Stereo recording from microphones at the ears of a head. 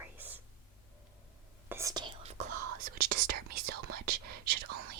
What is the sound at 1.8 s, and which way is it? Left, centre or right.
Whispering, right.